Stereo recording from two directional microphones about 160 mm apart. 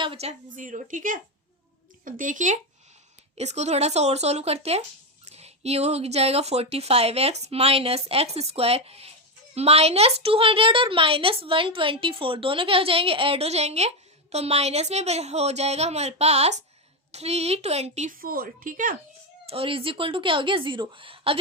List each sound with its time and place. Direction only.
0.0 s a woman's voice: 35° right (ahead or behind)
18.1 s a woman's voice: 65° right (ahead or behind)
19.5 s a woman's voice: 35° right (ahead or behind)